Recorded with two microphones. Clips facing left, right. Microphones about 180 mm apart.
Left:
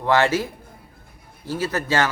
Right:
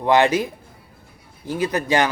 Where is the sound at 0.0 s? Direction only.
15° right (ahead or behind).